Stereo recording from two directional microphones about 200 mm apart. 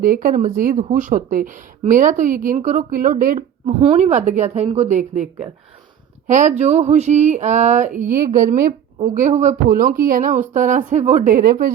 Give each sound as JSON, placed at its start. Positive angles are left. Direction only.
{"t": 0.0, "sound": "speech", "side_deg": -45}
{"t": 3.7, "sound": "speech", "side_deg": -30}